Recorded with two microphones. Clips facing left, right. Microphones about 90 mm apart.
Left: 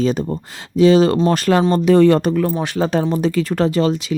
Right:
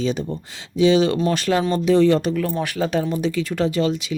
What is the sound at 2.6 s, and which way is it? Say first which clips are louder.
Speech: left 3 dB; 30° left (ahead or behind).